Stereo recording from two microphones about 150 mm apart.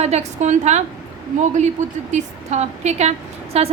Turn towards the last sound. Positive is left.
turn(degrees=-45)  # may be behind; listen again after turning